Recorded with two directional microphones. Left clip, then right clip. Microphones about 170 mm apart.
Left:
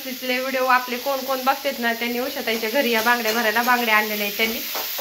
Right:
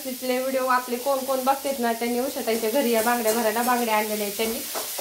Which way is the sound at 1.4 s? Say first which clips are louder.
Left 4 dB; centre (ahead or behind).